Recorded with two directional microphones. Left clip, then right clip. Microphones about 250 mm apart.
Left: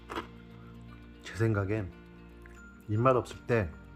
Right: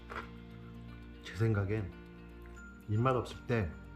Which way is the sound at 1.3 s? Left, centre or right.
Centre.